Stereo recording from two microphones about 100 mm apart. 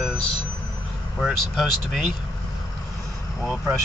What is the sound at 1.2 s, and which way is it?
Speech, 5° right (ahead or behind).